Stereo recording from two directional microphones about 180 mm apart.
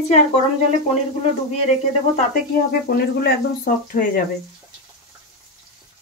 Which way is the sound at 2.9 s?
60° left (ahead or behind).